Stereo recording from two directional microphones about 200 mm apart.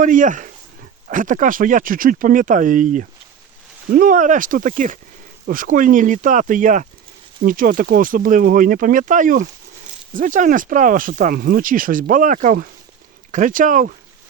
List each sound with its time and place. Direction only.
0.0 s speech: 40° right (ahead or behind)